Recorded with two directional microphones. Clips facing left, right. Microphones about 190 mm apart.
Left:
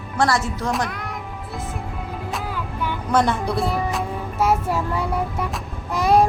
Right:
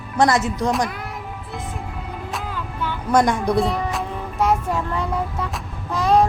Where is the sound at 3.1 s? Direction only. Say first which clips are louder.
Right 3 dB; 10° right (ahead or behind).